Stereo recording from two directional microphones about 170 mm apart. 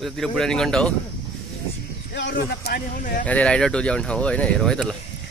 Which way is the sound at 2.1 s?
85° left.